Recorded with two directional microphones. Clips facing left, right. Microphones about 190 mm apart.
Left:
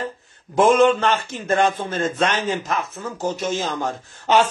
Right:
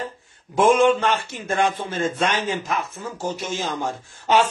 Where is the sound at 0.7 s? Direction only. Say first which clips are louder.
Left 1 dB; 10° right (ahead or behind).